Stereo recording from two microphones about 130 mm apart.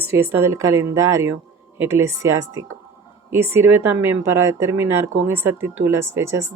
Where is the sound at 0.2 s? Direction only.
15° right (ahead or behind).